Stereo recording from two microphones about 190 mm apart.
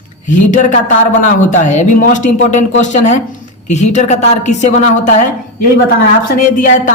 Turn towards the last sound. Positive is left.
turn(degrees=45)  # may be behind; listen again after turning